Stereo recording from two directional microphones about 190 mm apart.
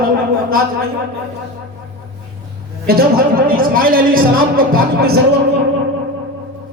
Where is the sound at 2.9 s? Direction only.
50° right (ahead or behind).